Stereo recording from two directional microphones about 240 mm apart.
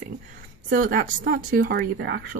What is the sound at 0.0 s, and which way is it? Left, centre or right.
Speech, right.